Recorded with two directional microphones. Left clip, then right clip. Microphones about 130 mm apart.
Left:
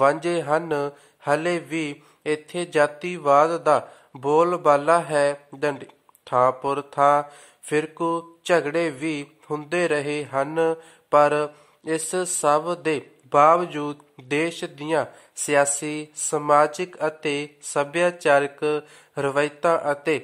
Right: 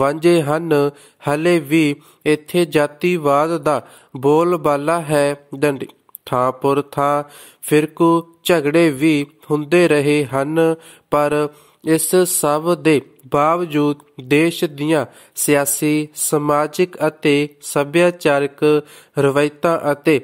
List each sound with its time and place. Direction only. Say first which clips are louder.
0.0 s speech: right 5 dB; 40° right (ahead or behind)